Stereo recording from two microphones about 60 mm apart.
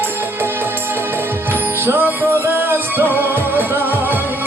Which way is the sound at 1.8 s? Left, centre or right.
Right.